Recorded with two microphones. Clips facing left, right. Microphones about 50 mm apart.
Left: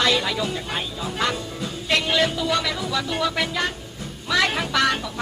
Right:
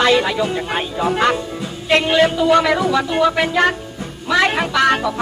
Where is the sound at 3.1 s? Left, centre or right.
Right.